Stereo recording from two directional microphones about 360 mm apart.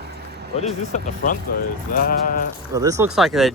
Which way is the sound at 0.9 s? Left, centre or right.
Centre.